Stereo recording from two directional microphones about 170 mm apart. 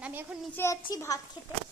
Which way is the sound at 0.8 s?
20° left (ahead or behind).